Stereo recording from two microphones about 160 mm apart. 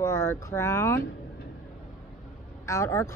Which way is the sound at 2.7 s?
15° left (ahead or behind).